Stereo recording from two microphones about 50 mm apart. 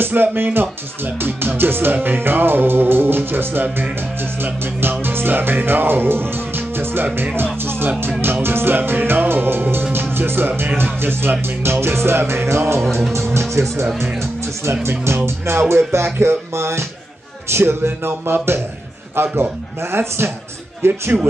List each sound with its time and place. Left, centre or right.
0.0 s speech: right
5.0 s music: right
8.2 s speech: right